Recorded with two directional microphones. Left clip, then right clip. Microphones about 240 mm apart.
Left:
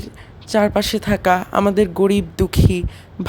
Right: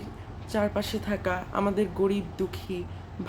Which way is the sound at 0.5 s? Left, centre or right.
Left.